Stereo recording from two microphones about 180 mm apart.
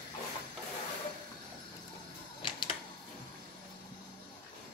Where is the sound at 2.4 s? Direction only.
25° left (ahead or behind).